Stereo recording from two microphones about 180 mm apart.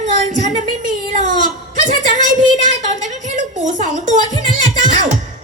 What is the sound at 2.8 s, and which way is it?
A woman's voice, 45° right (ahead or behind).